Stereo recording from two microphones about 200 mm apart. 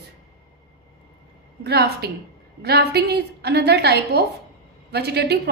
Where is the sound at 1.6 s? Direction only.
55° right (ahead or behind).